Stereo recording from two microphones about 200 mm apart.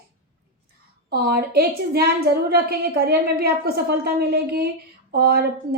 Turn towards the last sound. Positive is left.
turn(degrees=-50)  # may be behind; listen again after turning